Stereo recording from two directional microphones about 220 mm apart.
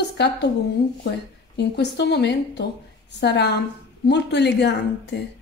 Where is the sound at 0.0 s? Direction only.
50° left (ahead or behind).